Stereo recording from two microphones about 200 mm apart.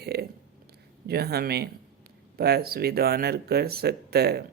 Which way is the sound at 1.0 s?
55° right (ahead or behind).